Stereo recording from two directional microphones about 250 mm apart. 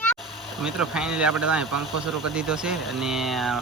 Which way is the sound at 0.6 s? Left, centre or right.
Centre.